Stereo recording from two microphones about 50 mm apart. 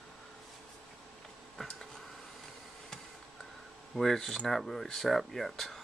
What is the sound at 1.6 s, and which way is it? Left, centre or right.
Speech, centre.